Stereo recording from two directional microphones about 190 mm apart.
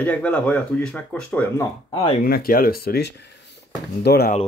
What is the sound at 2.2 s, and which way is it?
Speech, 50° left (ahead or behind).